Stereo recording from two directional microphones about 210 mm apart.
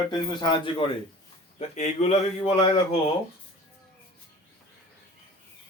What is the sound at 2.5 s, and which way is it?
Speech, 20° left (ahead or behind).